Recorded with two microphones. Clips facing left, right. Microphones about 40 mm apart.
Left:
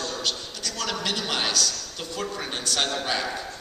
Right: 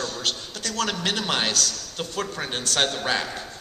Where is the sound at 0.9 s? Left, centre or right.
Right.